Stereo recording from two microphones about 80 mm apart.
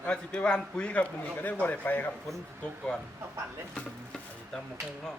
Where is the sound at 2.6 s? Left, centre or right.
Centre.